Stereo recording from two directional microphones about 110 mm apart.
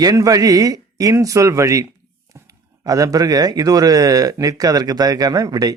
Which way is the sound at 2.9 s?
30° right (ahead or behind).